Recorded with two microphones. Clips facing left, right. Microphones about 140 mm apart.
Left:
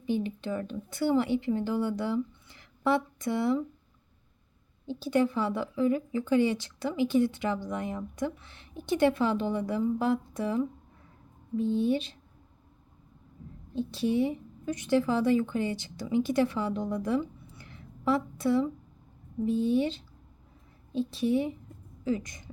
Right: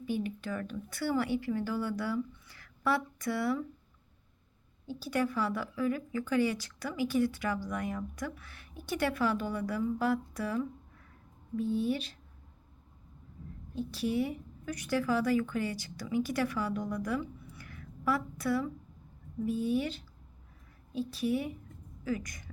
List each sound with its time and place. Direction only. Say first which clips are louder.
0.0 s a woman's voice: left 4 dB; 20° left (ahead or behind)
4.9 s a woman's voice: left 6 dB; 20° left (ahead or behind)
13.7 s a woman's voice: left 4 dB; 25° left (ahead or behind)